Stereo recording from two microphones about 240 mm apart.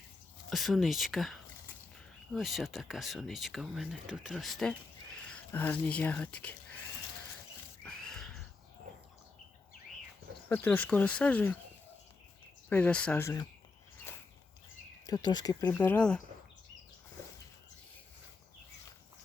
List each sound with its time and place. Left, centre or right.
0.5 s speech: centre
7.9 s a sound: centre
10.5 s speech: centre
12.6 s speech: centre
15.0 s speech: centre
15.7 s speech: centre